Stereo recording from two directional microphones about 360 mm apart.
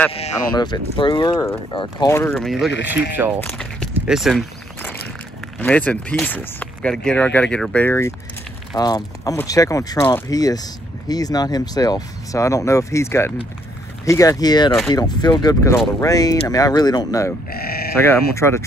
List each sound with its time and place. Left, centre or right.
0.1 s speech: centre
3.3 s a sound: centre
5.6 s speech: centre
17.5 s sheep: left
17.9 s speech: centre